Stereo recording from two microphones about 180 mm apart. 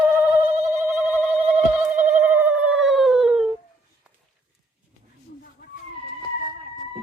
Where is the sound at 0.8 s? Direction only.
15° right (ahead or behind).